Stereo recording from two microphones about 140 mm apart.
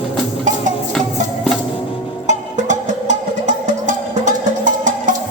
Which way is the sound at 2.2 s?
65° right (ahead or behind).